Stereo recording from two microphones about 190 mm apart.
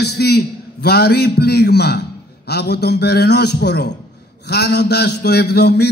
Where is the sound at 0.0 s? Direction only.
60° left (ahead or behind).